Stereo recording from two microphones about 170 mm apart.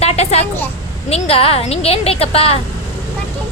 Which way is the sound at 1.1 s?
35° left (ahead or behind).